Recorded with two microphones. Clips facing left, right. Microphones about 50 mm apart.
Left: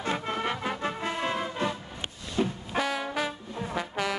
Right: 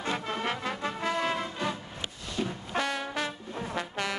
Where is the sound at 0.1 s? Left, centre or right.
Centre.